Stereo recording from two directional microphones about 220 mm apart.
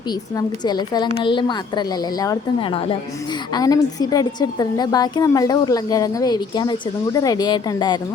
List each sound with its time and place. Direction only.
0.3 s a woman's voice: 20° left (ahead or behind)